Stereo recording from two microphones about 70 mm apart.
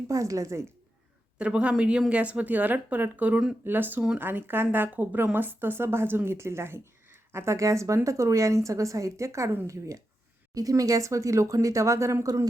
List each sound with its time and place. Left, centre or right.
0.1 s speech: right
1.4 s speech: centre; by 10.0 s right
10.5 s speech: right